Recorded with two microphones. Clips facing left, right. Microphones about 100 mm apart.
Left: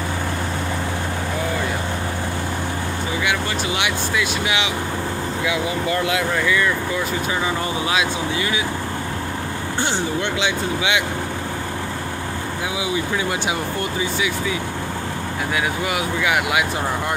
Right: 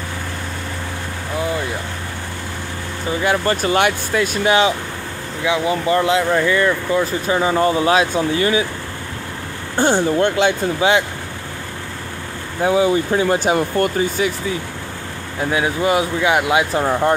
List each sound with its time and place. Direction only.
3.2 s speech: 40° right (ahead or behind)
5.4 s speech: 30° right (ahead or behind)
9.8 s speech: 45° right (ahead or behind)
12.6 s speech: 45° right (ahead or behind)
15.5 s speech: 30° right (ahead or behind)